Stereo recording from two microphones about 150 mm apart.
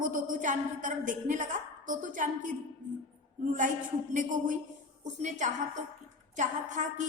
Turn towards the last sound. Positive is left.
turn(degrees=-55)  # may be behind; listen again after turning